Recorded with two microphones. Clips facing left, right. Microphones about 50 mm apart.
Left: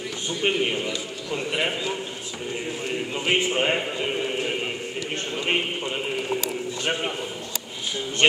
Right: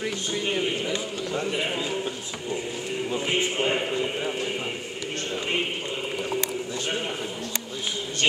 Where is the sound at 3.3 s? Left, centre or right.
Left.